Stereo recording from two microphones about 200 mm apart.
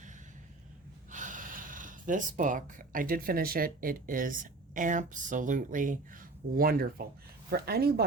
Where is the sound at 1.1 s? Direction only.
40° right (ahead or behind).